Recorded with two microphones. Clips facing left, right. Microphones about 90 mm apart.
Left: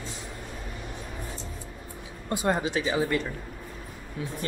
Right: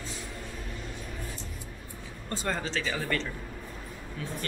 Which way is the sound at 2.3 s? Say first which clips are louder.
Left 6 dB; 15° left (ahead or behind).